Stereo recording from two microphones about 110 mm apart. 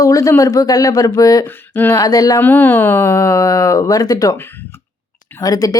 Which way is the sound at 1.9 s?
35° left (ahead or behind).